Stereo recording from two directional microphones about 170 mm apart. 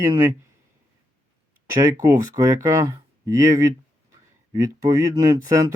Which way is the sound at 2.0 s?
20° right (ahead or behind).